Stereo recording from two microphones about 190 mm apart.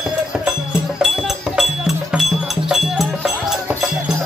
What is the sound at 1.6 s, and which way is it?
Music, centre (ahead or behind).